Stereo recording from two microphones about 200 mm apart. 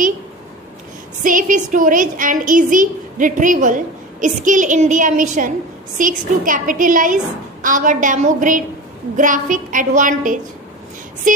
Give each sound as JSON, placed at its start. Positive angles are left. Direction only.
{"t": 1.2, "sound": "a woman's voice", "side_deg": -40}